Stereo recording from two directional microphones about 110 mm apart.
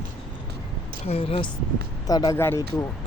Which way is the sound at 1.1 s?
60° left (ahead or behind).